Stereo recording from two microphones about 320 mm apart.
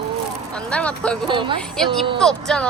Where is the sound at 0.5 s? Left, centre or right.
Centre.